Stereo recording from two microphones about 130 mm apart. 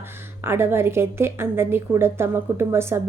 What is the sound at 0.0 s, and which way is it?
A woman's voice, 15° right (ahead or behind).